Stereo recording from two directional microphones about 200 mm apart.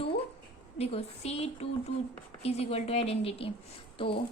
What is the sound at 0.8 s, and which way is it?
A woman's voice, 30° left (ahead or behind).